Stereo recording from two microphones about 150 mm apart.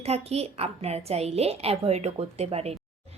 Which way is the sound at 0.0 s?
45° right (ahead or behind).